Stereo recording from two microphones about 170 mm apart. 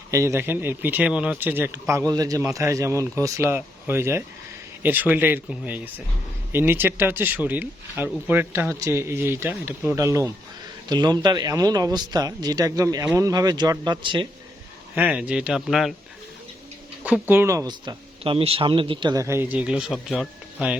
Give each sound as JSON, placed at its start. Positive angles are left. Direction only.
{"t": 0.1, "sound": "speech", "side_deg": -15}
{"t": 14.9, "sound": "speech", "side_deg": -10}
{"t": 17.0, "sound": "speech", "side_deg": -10}